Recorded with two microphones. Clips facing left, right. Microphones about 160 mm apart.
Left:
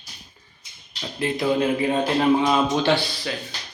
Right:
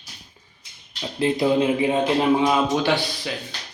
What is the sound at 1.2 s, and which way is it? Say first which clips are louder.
A man's voice: right 2 dB; 25° right (ahead or behind).